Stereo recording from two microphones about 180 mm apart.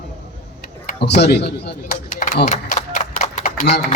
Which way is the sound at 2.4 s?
40° left (ahead or behind).